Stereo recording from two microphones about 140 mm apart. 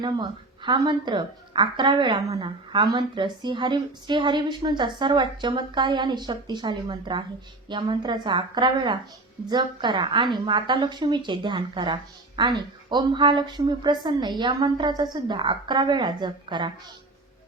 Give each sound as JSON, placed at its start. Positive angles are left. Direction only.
{"t": 0.0, "sound": "a woman's voice", "side_deg": -30}
{"t": 2.2, "sound": "a woman's voice", "side_deg": -25}